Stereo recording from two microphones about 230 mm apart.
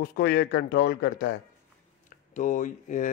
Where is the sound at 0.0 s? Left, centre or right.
Left.